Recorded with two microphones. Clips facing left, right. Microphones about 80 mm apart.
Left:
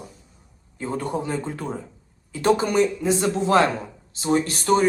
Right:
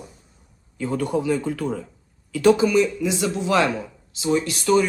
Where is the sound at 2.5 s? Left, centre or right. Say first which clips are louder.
Right 2 dB; left.